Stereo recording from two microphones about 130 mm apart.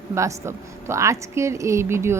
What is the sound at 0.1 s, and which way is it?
A woman's voice, 20° right (ahead or behind).